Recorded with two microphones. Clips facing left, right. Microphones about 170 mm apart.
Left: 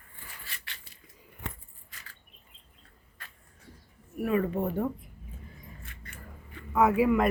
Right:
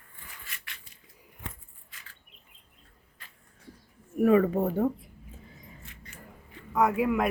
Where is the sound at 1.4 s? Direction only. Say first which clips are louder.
Left 2 dB; 70° left (ahead or behind).